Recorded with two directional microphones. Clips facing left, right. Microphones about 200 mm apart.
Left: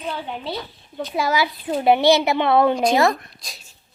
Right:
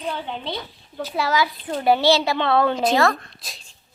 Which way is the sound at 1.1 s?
15° left (ahead or behind).